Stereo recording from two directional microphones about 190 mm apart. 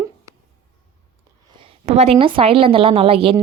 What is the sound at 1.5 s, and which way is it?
A woman's voice, 30° right (ahead or behind).